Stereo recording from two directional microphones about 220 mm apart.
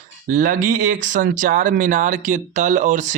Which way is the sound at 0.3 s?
35° right (ahead or behind).